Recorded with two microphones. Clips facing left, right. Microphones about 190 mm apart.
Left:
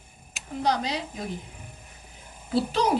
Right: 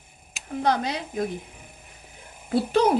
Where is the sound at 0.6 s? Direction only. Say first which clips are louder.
Right 2 dB; 55° right (ahead or behind).